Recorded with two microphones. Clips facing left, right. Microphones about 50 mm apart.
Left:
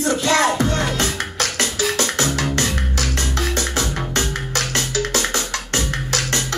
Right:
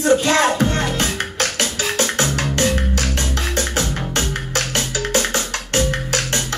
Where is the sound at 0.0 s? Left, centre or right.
Right.